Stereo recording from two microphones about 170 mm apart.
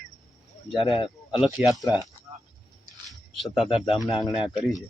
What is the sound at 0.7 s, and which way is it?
Speech, 30° left (ahead or behind).